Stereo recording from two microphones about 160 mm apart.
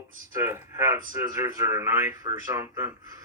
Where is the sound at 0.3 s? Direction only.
15° right (ahead or behind).